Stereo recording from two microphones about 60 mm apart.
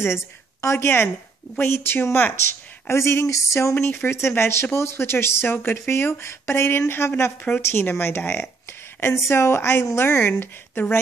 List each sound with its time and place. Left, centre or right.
0.0 s a woman's voice: left
2.9 s speech: left